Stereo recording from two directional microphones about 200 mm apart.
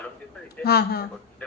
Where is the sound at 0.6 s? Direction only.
50° left (ahead or behind).